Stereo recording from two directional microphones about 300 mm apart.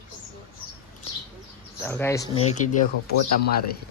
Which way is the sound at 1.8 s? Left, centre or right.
Centre.